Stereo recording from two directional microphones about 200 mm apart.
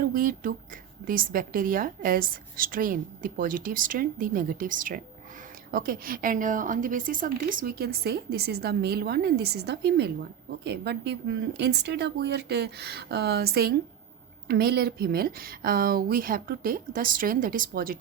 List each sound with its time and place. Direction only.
0.0 s a woman's voice: 45° right (ahead or behind)